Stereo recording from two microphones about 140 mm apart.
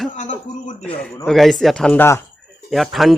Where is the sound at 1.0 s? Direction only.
10° left (ahead or behind).